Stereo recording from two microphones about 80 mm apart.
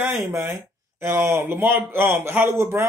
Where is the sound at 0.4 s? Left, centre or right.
Right.